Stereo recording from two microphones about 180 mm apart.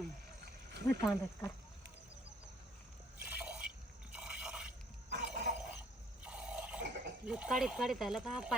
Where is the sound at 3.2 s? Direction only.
5° right (ahead or behind).